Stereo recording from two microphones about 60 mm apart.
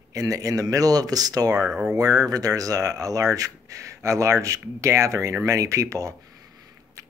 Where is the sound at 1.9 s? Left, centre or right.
Right.